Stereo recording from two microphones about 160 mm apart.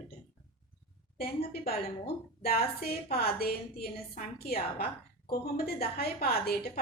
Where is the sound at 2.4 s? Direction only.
70° left (ahead or behind).